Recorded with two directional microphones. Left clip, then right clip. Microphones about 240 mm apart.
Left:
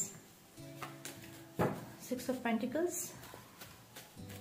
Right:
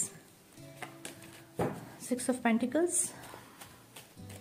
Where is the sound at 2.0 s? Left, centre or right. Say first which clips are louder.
Right 5 dB; right.